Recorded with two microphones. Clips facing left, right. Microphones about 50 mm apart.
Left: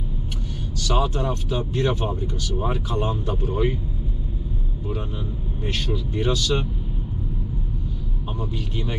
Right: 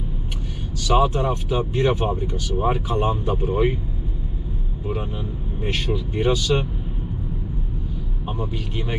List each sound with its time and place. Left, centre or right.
0.8 s speech: centre
5.6 s speech: right
8.4 s speech: centre